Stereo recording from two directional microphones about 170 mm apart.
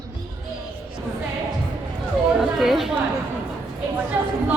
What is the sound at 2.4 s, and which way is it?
Speech, centre (ahead or behind).